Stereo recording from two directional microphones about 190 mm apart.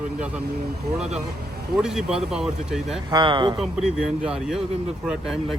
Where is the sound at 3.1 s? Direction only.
25° right (ahead or behind).